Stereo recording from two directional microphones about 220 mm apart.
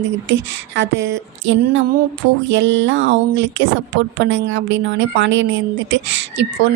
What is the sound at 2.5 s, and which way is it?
A woman's voice, 55° right (ahead or behind).